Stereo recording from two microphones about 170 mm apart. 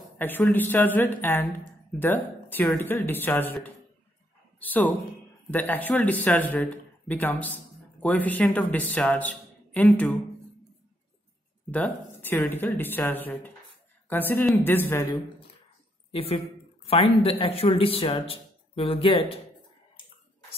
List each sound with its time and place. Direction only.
0.2 s speech: 10° left (ahead or behind)
11.7 s speech: 10° left (ahead or behind)
16.1 s speech: 35° left (ahead or behind)